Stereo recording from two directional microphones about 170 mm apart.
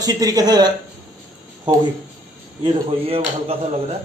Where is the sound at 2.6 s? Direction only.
30° right (ahead or behind).